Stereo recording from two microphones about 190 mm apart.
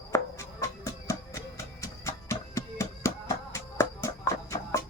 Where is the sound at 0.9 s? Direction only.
15° left (ahead or behind).